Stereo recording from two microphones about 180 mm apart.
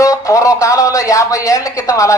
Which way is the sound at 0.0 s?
20° left (ahead or behind).